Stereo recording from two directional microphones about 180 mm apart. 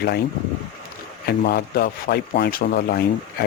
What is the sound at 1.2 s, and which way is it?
Speech, 60° left (ahead or behind).